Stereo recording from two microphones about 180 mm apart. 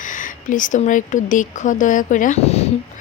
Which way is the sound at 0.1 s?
45° left (ahead or behind).